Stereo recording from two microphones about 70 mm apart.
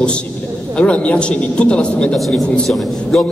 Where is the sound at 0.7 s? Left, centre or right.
Centre.